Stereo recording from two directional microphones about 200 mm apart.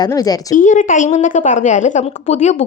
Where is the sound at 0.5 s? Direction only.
40° left (ahead or behind).